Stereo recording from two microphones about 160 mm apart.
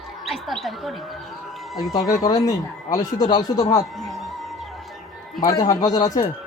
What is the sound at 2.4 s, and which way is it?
Speech, 20° left (ahead or behind).